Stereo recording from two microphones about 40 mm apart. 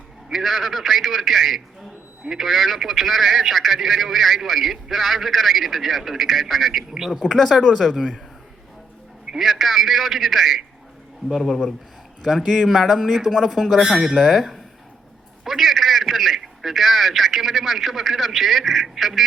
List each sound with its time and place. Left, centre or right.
0.3 s a man's voice: centre
7.8 s a man's voice: centre
9.4 s a man's voice: centre
12.8 s a man's voice: centre
14.1 s a man's voice: centre